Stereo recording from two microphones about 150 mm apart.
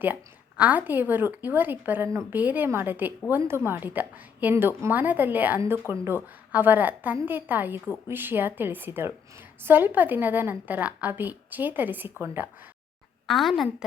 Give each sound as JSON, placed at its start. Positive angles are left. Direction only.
{"t": 0.0, "sound": "a woman's voice", "side_deg": -10}
{"t": 13.2, "sound": "a woman's voice", "side_deg": 0}